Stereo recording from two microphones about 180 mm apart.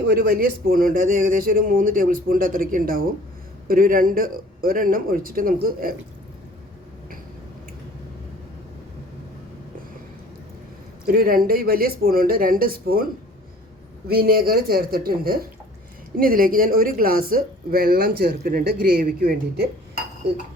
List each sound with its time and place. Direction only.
0.1 s a woman's voice: 60° right (ahead or behind)
11.0 s speech: 55° right (ahead or behind)
14.1 s a woman's voice: 55° right (ahead or behind)